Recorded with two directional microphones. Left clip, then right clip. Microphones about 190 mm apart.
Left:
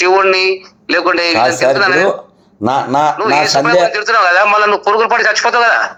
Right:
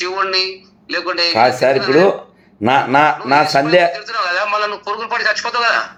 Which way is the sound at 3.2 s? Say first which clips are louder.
Left 2 dB; 50° left (ahead or behind).